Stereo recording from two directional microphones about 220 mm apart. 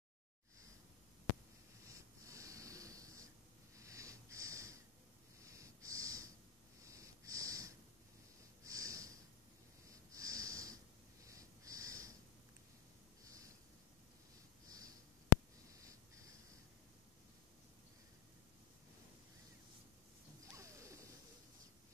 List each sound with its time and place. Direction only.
1.9 s wheeze: 15° right (ahead or behind)
3.7 s sniff: 15° right (ahead or behind)
5.4 s snort: 15° right (ahead or behind)
6.8 s wheeze: 15° right (ahead or behind)
8.6 s snort: 15° right (ahead or behind)
9.8 s wheeze: 15° right (ahead or behind)
14.7 s a sound: 15° right (ahead or behind)
20.5 s a sound: 15° right (ahead or behind)